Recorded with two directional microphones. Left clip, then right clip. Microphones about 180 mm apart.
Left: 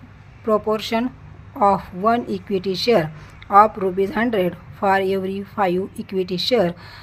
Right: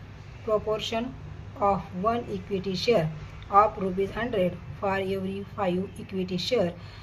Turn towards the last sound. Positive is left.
turn(degrees=45)  # may be behind; listen again after turning